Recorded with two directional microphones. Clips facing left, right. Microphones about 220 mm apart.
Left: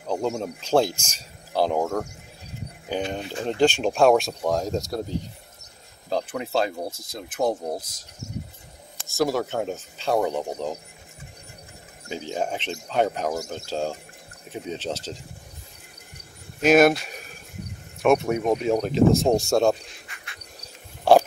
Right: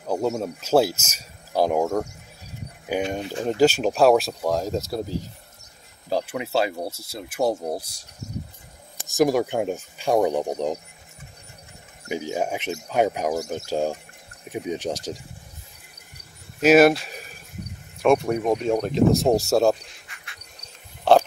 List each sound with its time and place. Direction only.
0.0 s speech: 5° right (ahead or behind)
6.0 s speech: 5° right (ahead or behind)
8.9 s speech: 15° right (ahead or behind)
12.1 s speech: 10° right (ahead or behind)
16.6 s speech: 5° right (ahead or behind)
21.1 s pig: 10° left (ahead or behind)